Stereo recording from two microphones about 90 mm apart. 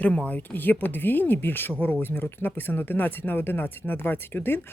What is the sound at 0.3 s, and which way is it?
Speech, 20° left (ahead or behind).